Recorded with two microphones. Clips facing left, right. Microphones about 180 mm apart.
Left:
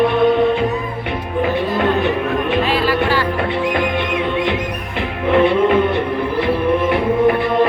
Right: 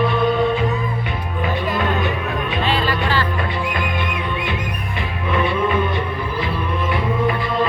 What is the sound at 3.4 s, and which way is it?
Music, 60° left (ahead or behind).